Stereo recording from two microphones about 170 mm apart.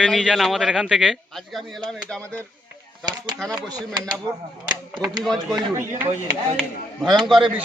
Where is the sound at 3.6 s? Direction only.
25° right (ahead or behind).